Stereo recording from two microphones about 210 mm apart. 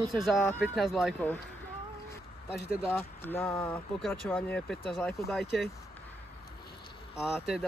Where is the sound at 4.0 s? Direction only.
Centre (ahead or behind).